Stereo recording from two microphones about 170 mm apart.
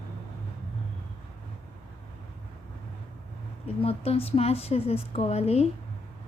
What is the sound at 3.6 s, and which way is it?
Speech, 35° left (ahead or behind).